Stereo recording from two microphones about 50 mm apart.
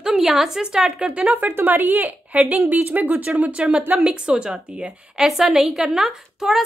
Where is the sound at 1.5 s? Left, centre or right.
Right.